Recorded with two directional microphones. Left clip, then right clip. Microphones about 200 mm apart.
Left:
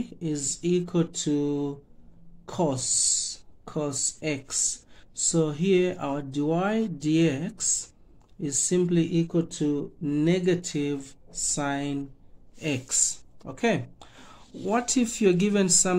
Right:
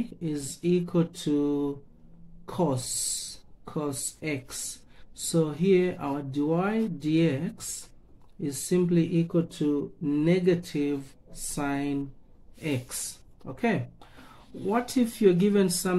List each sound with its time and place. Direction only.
0.2 s speech: 30° left (ahead or behind)